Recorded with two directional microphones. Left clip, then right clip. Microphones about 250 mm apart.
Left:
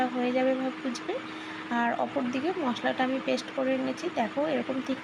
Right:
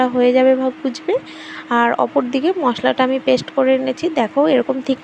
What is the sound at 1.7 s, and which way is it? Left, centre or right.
Speech, right.